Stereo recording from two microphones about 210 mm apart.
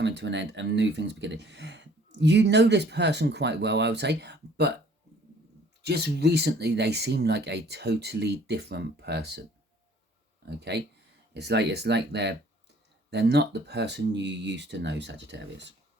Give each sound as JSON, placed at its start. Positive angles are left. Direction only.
{"t": 0.0, "sound": "speech", "side_deg": -55}
{"t": 5.8, "sound": "speech", "side_deg": -50}
{"t": 10.6, "sound": "speech", "side_deg": -55}